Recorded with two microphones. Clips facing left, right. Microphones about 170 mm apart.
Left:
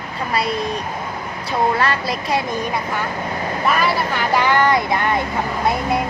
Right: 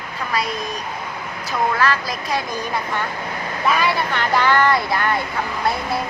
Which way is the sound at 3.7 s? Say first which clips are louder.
Even; 5° left (ahead or behind).